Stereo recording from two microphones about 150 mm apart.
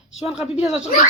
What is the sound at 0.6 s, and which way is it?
Speech, 5° right (ahead or behind).